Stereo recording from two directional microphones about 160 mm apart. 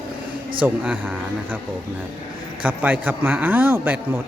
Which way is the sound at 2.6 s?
10° right (ahead or behind).